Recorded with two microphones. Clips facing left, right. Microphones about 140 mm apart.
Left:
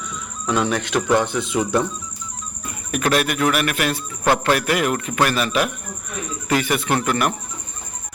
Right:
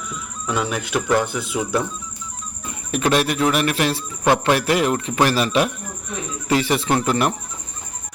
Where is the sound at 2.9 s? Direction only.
30° right (ahead or behind).